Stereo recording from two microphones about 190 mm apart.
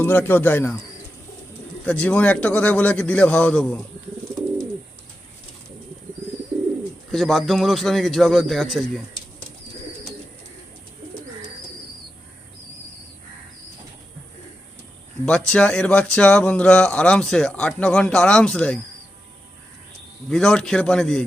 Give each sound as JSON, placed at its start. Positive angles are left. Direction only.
{"t": 0.0, "sound": "a man's voice", "side_deg": 10}
{"t": 1.8, "sound": "a man's voice", "side_deg": 5}
{"t": 7.1, "sound": "speech", "side_deg": 0}
{"t": 15.3, "sound": "speech", "side_deg": 5}
{"t": 20.3, "sound": "speech", "side_deg": 5}